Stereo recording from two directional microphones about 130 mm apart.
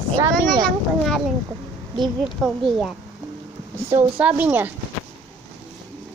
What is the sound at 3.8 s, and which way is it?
Speech, 15° right (ahead or behind).